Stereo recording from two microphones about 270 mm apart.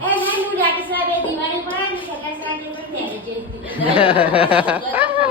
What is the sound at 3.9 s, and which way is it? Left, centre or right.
Speech, centre.